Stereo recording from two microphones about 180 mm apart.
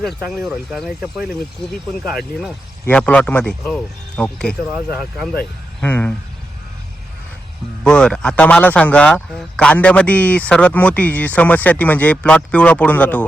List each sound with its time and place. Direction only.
0.0 s speech: centre (ahead or behind)
5.8 s speech: 10° left (ahead or behind)
7.9 s speech: 5° left (ahead or behind)